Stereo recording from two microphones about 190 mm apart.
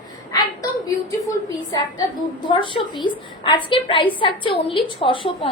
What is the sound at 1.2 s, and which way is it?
A woman's voice, 20° left (ahead or behind).